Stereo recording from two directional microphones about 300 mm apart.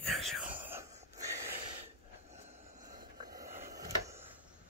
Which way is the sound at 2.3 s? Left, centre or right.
Right.